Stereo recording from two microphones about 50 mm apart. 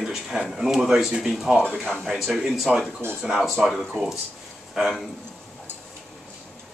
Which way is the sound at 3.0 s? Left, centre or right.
Right.